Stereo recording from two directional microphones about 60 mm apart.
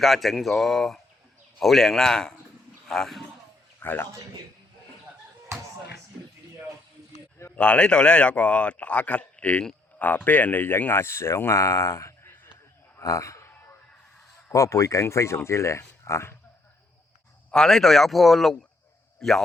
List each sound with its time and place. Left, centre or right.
0.0 s a man's voice: centre
3.8 s a man's voice: left
5.5 s a sound: right
7.5 s a man's voice: centre; by 12.3 s left
13.0 s a sound: left
14.5 s speech: left
17.5 s a man's voice: centre